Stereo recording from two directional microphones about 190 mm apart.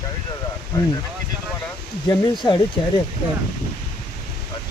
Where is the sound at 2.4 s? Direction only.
20° left (ahead or behind).